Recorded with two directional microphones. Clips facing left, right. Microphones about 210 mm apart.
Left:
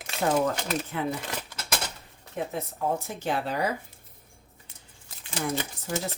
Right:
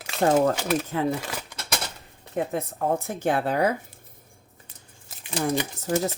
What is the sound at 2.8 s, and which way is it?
Speech, 55° right (ahead or behind).